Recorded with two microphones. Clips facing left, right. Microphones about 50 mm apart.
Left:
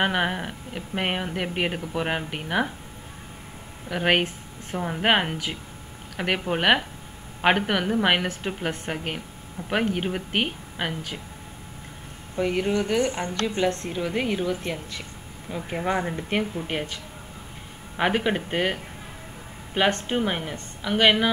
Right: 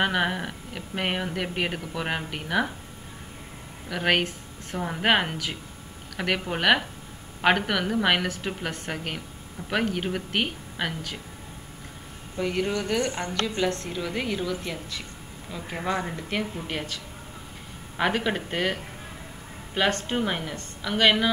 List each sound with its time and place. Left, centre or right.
0.0 s a woman's voice: centre
3.9 s a woman's voice: centre
12.4 s a woman's voice: centre